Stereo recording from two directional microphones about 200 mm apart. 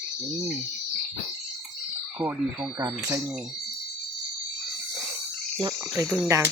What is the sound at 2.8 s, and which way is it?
Speech, 20° right (ahead or behind).